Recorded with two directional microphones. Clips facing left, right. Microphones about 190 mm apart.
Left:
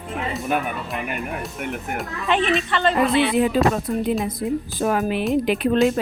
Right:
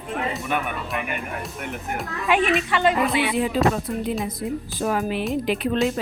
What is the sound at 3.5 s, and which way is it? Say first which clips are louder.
Speech: even; 55° left (ahead or behind).